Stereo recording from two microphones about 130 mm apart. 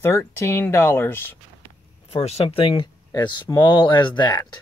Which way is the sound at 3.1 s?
30° left (ahead or behind).